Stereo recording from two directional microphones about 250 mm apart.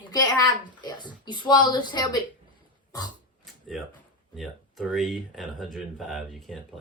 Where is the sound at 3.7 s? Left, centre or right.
Centre.